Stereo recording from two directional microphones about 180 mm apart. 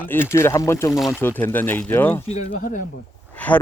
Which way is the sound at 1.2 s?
10° left (ahead or behind).